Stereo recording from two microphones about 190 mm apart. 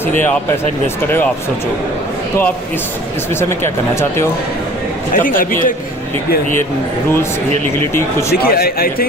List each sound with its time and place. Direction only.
5.1 s speech: 45° left (ahead or behind)
8.4 s speech: 50° left (ahead or behind)